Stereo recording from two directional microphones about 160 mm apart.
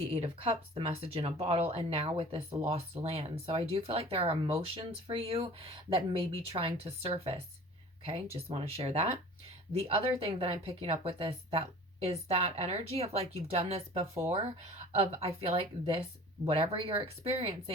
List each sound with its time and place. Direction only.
0.0 s speech: 35° right (ahead or behind)